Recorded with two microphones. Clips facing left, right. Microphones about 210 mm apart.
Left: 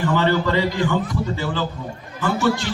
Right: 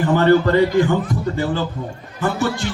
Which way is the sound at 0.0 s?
50° right (ahead or behind).